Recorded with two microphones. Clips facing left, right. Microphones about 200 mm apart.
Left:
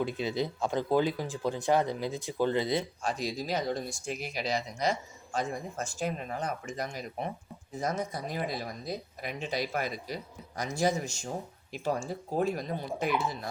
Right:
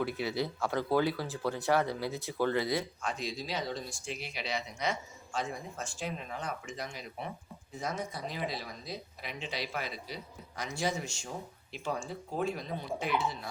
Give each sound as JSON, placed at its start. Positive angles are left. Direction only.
{"t": 0.0, "sound": "speech", "side_deg": 20}
{"t": 3.0, "sound": "speech", "side_deg": 35}